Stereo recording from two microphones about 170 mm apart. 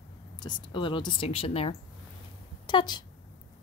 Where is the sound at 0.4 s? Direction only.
25° left (ahead or behind).